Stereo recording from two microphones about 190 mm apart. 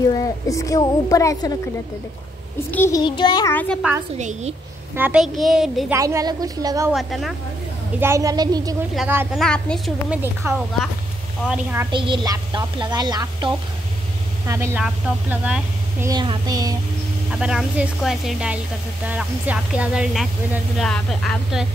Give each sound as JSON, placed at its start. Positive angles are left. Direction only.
{"t": 0.1, "sound": "a woman's voice", "side_deg": 15}
{"t": 2.7, "sound": "a woman's voice", "side_deg": 10}
{"t": 3.0, "sound": "child singing", "side_deg": 25}
{"t": 3.5, "sound": "speech", "side_deg": 5}
{"t": 4.2, "sound": "a woman's voice", "side_deg": -40}
{"t": 4.9, "sound": "speech", "side_deg": -5}
{"t": 5.9, "sound": "a woman's voice", "side_deg": -15}
{"t": 6.9, "sound": "speech", "side_deg": 0}
{"t": 8.0, "sound": "a woman's voice", "side_deg": -15}
{"t": 8.9, "sound": "a woman's voice", "side_deg": -10}
{"t": 9.3, "sound": "a woman's voice", "side_deg": 5}
{"t": 11.9, "sound": "a woman's voice", "side_deg": -25}
{"t": 16.1, "sound": "a woman's voice", "side_deg": -20}
{"t": 17.3, "sound": "speech", "side_deg": -5}